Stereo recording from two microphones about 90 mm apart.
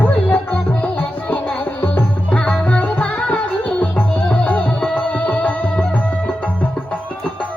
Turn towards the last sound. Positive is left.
turn(degrees=15)  # may be behind; listen again after turning